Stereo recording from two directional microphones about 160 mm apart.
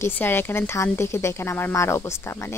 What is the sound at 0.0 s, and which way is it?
Speech, 15° left (ahead or behind).